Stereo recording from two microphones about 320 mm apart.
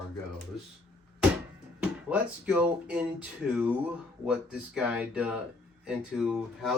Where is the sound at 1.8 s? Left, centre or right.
Centre.